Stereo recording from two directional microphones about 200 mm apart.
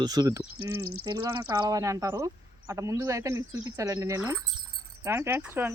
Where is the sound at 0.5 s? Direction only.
90° right.